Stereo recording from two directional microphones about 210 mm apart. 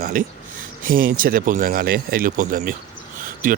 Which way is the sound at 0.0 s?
40° right (ahead or behind).